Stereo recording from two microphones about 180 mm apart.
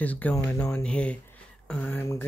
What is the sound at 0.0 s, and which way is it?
Speech, 10° left (ahead or behind).